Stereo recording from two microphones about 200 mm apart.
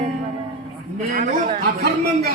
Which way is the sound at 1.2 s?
35° right (ahead or behind).